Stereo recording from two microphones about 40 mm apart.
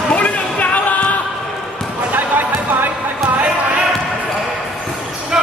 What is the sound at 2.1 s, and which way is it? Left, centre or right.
Basketball bounce, right.